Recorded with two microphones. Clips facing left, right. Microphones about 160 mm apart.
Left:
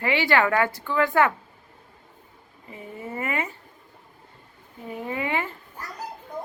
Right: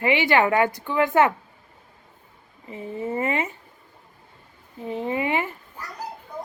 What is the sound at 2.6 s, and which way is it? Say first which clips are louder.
Speech: right 7 dB; 25° right (ahead or behind).